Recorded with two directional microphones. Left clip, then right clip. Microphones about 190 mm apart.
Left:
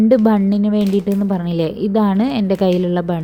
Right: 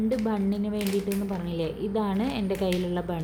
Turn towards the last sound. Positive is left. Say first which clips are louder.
# left 11 dB
turn(degrees=35)  # may be behind; listen again after turning